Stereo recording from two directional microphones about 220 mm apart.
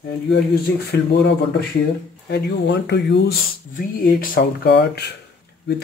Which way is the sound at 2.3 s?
50° left (ahead or behind).